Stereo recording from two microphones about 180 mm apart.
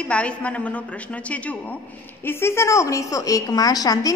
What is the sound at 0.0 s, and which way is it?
A woman's voice, 5° left (ahead or behind).